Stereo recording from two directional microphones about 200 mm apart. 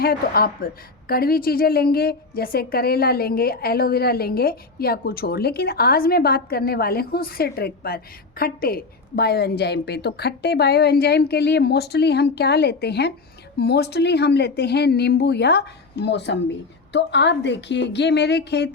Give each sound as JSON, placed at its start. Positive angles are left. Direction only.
{"t": 0.0, "sound": "a woman's voice", "side_deg": 50}